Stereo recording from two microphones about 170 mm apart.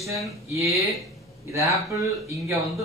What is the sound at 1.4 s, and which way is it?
Speech, 20° right (ahead or behind).